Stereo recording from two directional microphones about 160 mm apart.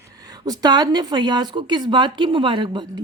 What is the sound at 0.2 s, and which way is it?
A woman's voice, 25° right (ahead or behind).